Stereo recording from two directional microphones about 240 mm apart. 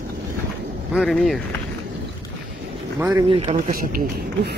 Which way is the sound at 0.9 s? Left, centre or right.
Centre.